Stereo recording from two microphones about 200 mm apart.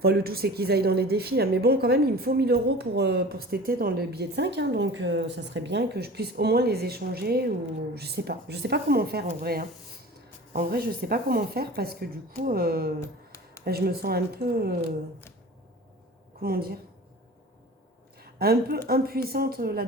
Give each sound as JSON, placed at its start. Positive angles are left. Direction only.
{"t": 0.0, "sound": "a woman's voice", "side_deg": -50}
{"t": 13.0, "sound": "a sound", "side_deg": 15}
{"t": 13.7, "sound": "a woman's voice", "side_deg": -50}
{"t": 16.4, "sound": "a woman's voice", "side_deg": -50}
{"t": 18.2, "sound": "a sound", "side_deg": -50}
{"t": 18.9, "sound": "a woman's voice", "side_deg": -50}